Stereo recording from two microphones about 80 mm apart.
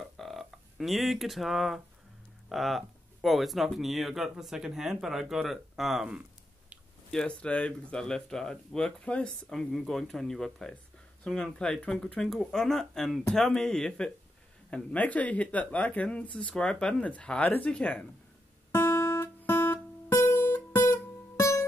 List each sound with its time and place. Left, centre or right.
0.0 s a sound: centre
2.5 s speech: centre
7.1 s speech: centre
18.7 s guitar: left
19.4 s music: left